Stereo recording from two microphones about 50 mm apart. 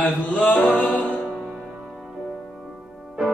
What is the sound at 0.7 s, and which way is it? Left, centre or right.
Music, left.